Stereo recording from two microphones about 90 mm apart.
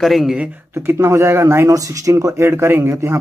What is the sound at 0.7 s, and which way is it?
Speech, 25° right (ahead or behind).